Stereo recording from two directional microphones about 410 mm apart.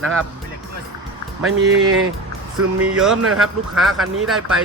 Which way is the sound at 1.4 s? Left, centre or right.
Right.